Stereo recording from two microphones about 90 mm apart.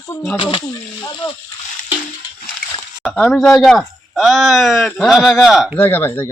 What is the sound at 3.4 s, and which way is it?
A woman's voice, 5° left (ahead or behind).